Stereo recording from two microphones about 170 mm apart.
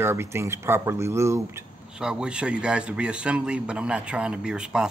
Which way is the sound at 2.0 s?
5° right (ahead or behind).